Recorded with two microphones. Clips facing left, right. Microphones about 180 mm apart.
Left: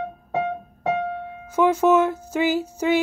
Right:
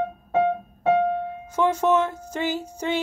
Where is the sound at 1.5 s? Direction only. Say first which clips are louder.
Left 3 dB; 10° left (ahead or behind).